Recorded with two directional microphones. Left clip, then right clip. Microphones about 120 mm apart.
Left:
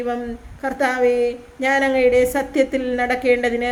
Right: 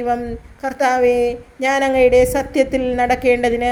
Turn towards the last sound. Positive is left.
turn(degrees=-35)  # may be behind; listen again after turning